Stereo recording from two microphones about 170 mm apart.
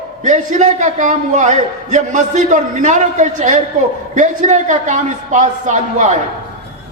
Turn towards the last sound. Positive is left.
turn(degrees=-45)  # may be behind; listen again after turning